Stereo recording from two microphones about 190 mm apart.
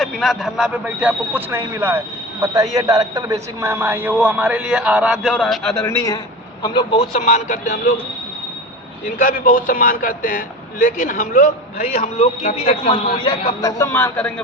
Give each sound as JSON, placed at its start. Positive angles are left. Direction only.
{"t": 0.0, "sound": "a man's voice", "side_deg": 0}
{"t": 6.6, "sound": "a man's voice", "side_deg": 25}
{"t": 9.1, "sound": "a man's voice", "side_deg": 50}